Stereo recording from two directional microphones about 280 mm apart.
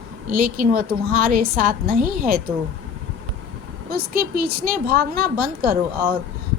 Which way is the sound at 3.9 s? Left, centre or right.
Right.